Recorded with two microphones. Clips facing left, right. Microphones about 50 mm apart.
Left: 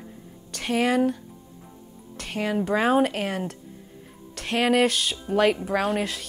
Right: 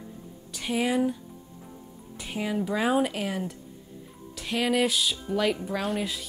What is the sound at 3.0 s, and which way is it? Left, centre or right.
Speech, left.